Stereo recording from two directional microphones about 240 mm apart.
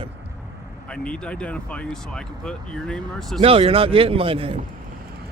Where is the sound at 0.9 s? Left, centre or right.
Centre.